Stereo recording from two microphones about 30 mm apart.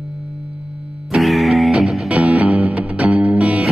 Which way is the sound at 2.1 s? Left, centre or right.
Right.